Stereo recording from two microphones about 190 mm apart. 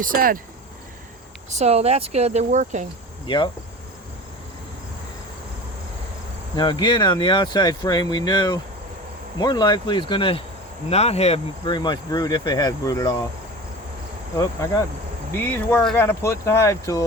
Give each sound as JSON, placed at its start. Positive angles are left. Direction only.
{"t": 0.0, "sound": "speech", "side_deg": -45}
{"t": 1.5, "sound": "speech", "side_deg": -35}
{"t": 3.2, "sound": "speech", "side_deg": 25}
{"t": 6.6, "sound": "speech", "side_deg": 20}
{"t": 14.3, "sound": "speech", "side_deg": 15}
{"t": 15.4, "sound": "speech", "side_deg": 5}